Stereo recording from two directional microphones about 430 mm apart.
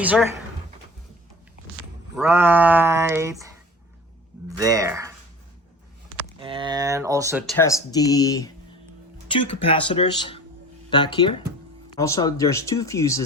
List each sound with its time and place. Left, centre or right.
0.0 s speech: centre
2.1 s speech: centre
6.4 s speech: centre